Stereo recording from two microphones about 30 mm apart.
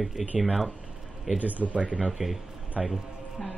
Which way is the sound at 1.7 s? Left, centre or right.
Right.